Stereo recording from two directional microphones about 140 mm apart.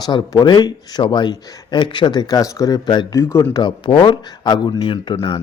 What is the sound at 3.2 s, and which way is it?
Speech, 20° left (ahead or behind).